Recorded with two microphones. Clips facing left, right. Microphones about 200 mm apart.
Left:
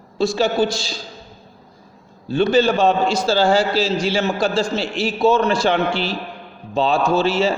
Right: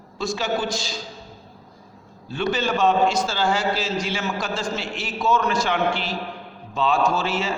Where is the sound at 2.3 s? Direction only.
30° left (ahead or behind).